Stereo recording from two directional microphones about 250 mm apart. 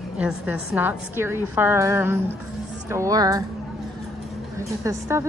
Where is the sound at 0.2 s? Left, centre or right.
Centre.